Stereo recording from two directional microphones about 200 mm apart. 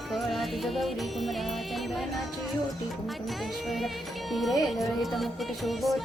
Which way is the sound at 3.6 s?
Centre (ahead or behind).